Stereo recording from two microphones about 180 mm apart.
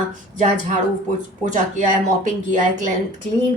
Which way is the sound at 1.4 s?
40° right (ahead or behind).